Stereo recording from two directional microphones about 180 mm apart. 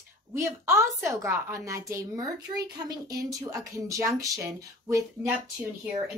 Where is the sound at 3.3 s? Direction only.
15° right (ahead or behind).